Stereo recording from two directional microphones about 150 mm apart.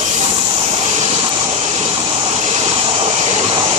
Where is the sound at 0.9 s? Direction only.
45° right (ahead or behind).